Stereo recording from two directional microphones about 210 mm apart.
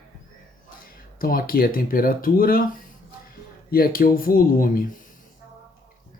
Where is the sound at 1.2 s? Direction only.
45° left (ahead or behind).